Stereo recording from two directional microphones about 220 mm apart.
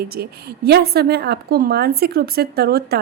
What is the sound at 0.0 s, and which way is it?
A woman's voice, 45° right (ahead or behind).